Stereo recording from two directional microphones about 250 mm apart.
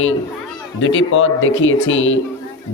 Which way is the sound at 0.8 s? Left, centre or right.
Left.